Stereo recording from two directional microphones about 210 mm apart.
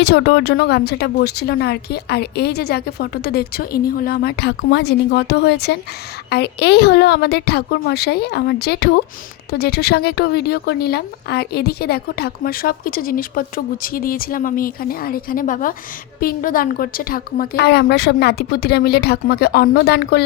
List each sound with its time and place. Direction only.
0.0 s a woman's voice: 55° left (ahead or behind)